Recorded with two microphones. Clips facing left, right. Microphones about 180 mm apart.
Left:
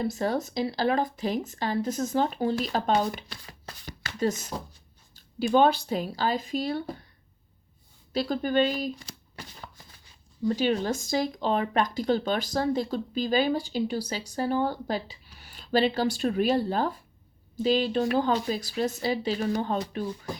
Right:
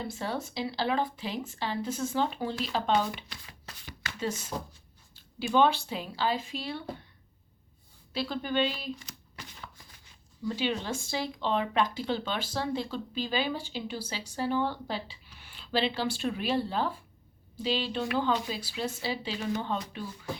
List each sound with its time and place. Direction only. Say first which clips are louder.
0.0 s a woman's voice: left 7 dB; 40° left (ahead or behind)
8.1 s speech: left 5 dB; 45° left (ahead or behind)
10.5 s speech: left 5 dB; 40° left (ahead or behind)